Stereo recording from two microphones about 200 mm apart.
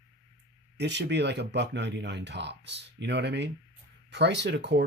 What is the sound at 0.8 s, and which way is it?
Speech, 60° right (ahead or behind).